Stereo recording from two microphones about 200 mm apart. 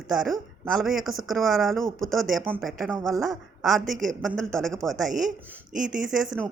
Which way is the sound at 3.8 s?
40° right (ahead or behind).